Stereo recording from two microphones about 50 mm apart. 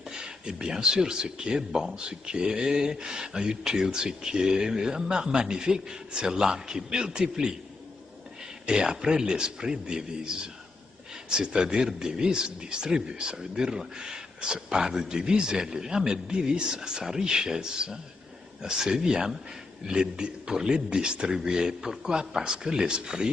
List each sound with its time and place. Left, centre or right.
0.0 s speech: centre
8.6 s speech: centre